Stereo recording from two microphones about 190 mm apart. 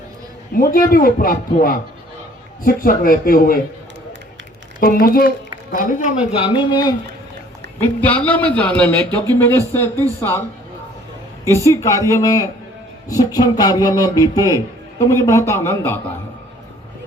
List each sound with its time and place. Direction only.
0.5 s speech: 45° left (ahead or behind)
2.6 s speech: 45° left (ahead or behind)
4.8 s speech: 50° left (ahead or behind)
6.3 s speech: 25° left (ahead or behind)
7.8 s a man's voice: 10° left (ahead or behind)
11.4 s a man's voice: 15° left (ahead or behind)